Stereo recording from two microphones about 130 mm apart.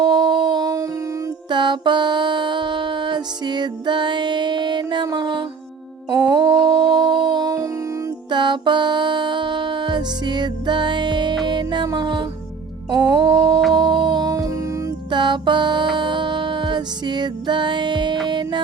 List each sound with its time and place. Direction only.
0.0 s humming: 35° right (ahead or behind)
1.5 s music: 35° right (ahead or behind)
6.1 s a sound: 35° right (ahead or behind)
6.9 s music: 35° right (ahead or behind)
13.7 s a sound: 35° right (ahead or behind)
15.1 s music: 35° right (ahead or behind)